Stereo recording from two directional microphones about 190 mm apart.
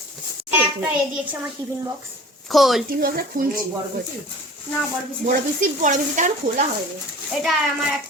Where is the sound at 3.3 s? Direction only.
45° right (ahead or behind).